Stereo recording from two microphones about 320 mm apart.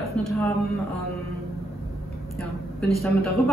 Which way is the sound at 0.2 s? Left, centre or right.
Centre.